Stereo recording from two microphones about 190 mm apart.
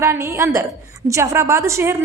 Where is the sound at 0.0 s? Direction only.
15° right (ahead or behind).